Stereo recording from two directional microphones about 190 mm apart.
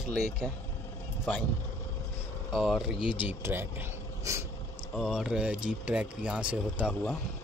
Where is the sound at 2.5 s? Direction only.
Centre (ahead or behind); by 4.5 s 15° right (ahead or behind).